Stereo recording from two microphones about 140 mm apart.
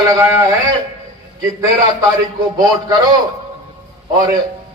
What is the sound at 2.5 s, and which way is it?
Speech, 25° right (ahead or behind).